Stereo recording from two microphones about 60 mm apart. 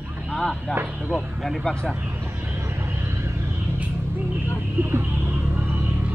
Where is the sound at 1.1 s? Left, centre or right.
Centre.